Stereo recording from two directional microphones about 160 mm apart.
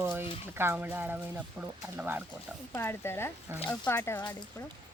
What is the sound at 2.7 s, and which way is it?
Speech, 15° left (ahead or behind).